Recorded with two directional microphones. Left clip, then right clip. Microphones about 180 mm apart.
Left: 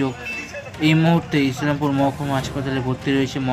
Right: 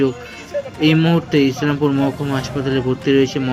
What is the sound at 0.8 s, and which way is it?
Speech, centre (ahead or behind).